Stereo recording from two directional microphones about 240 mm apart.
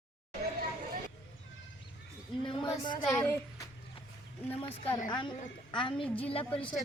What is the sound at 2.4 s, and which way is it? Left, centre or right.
Female singing, left.